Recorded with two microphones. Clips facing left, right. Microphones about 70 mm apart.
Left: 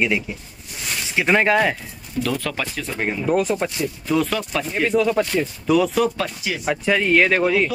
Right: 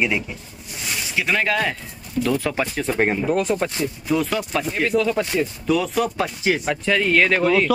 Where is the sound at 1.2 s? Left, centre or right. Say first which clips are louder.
Left 4 dB; left.